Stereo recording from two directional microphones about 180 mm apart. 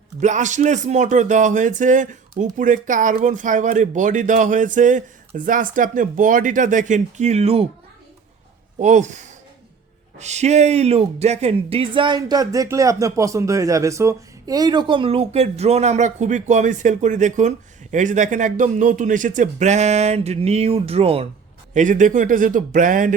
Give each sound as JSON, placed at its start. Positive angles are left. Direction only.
{"t": 0.2, "sound": "speech", "side_deg": -40}
{"t": 8.8, "sound": "speech", "side_deg": -40}
{"t": 21.7, "sound": "speech", "side_deg": -45}